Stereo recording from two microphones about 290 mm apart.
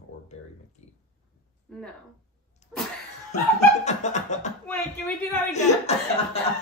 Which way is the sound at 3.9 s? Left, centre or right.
Left.